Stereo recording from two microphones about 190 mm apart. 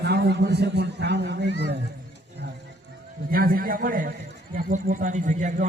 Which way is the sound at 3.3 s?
50° right (ahead or behind).